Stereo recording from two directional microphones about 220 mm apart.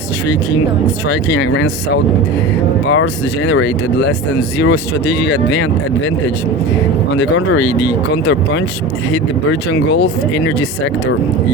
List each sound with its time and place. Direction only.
1.0 s speech: 55° left (ahead or behind)
7.2 s speech: 55° left (ahead or behind)